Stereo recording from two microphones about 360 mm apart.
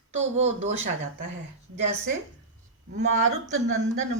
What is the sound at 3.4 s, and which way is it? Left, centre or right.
Speech, centre.